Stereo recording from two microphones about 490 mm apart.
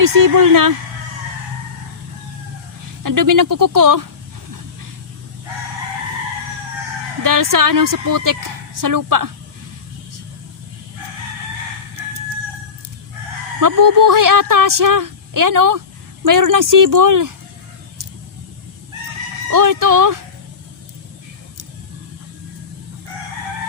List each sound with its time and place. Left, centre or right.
0.0 s speech: right
3.0 s speech: right
7.2 s speech: right
13.6 s speech: right
19.5 s speech: right